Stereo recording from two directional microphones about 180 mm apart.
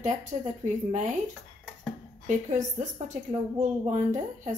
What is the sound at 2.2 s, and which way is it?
A woman's voice, 45° right (ahead or behind).